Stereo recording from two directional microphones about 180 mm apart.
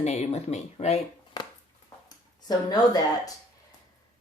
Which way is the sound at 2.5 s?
20° left (ahead or behind).